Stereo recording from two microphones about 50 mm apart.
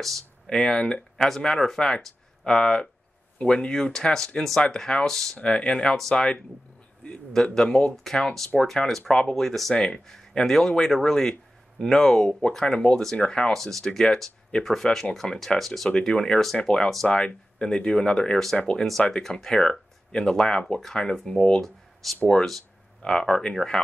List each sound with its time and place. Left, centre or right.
0.0 s speech: centre
5.4 s speech: left
7.5 s speech: centre
15.9 s speech: centre
16.9 s speech: centre
17.6 s speech: centre
18.8 s speech: centre